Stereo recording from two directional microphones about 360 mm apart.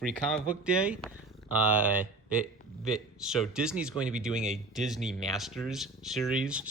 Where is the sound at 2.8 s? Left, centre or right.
Centre.